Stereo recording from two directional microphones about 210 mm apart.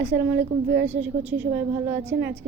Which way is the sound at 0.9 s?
5° right (ahead or behind).